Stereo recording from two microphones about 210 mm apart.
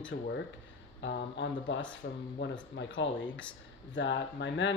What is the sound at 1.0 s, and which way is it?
Speech, 55° left (ahead or behind).